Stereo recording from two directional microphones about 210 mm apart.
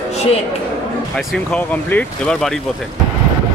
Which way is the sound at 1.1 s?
5° left (ahead or behind).